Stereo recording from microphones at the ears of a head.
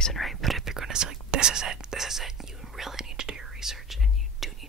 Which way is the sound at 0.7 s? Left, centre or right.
Right.